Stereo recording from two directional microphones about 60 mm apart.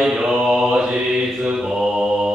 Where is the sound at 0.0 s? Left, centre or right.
Centre.